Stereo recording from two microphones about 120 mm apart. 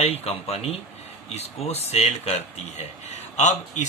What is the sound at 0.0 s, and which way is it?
Speech, 60° left (ahead or behind).